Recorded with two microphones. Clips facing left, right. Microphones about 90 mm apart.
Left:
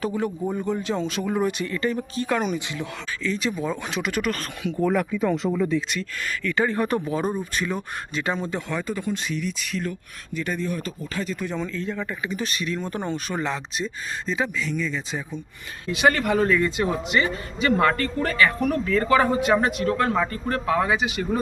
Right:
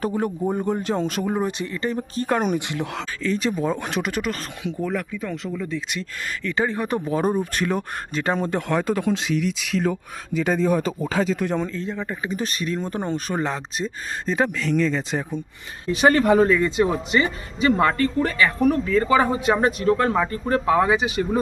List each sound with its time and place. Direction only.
0.0 s speech: 45° right (ahead or behind)
1.3 s speech: 30° right (ahead or behind); by 3.3 s 60° right (ahead or behind)
3.3 s speech: 40° right (ahead or behind)
4.1 s a man's voice: 25° right (ahead or behind)
4.8 s speech: 15° left (ahead or behind)
6.0 s a man's voice: 30° right (ahead or behind)
7.0 s speech: 40° right (ahead or behind)
7.5 s speech: 60° right (ahead or behind); by 9.8 s 90° right
11.0 s speech: 65° right (ahead or behind)
11.6 s speech: 35° right (ahead or behind); by 15.2 s 85° right
15.9 s a man's voice: 30° right (ahead or behind); by 19.4 s 15° right (ahead or behind)
19.6 s a man's voice: 30° right (ahead or behind)